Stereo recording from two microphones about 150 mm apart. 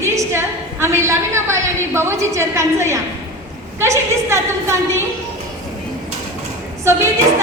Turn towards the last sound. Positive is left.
turn(degrees=-15)  # may be behind; listen again after turning